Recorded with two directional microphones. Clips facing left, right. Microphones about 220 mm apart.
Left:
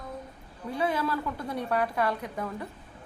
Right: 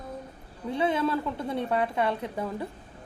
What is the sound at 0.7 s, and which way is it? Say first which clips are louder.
A woman's voice: right 3 dB; 25° right (ahead or behind).